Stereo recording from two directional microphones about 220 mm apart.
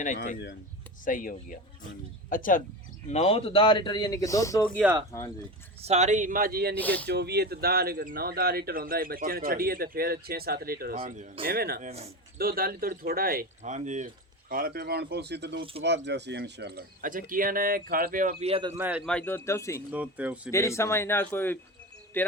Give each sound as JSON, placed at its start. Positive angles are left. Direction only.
{"t": 1.0, "sound": "speech", "side_deg": 35}
{"t": 5.8, "sound": "speech", "side_deg": -30}
{"t": 6.7, "sound": "a man's voice", "side_deg": 5}
{"t": 7.1, "sound": "speech", "side_deg": -50}
{"t": 11.0, "sound": "speech", "side_deg": -35}
{"t": 11.9, "sound": "a man's voice", "side_deg": -30}
{"t": 12.4, "sound": "speech", "side_deg": -40}
{"t": 14.5, "sound": "speech", "side_deg": -45}
{"t": 18.7, "sound": "speech", "side_deg": -10}
{"t": 19.0, "sound": "a man's voice", "side_deg": 5}
{"t": 19.9, "sound": "speech", "side_deg": -5}
{"t": 20.5, "sound": "a man's voice", "side_deg": 15}